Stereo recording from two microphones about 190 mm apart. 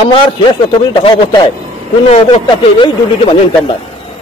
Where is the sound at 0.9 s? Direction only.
25° left (ahead or behind).